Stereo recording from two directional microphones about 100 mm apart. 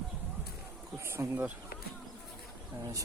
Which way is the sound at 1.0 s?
25° right (ahead or behind).